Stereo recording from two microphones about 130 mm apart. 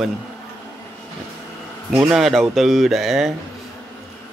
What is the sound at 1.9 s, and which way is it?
Speech, 5° right (ahead or behind).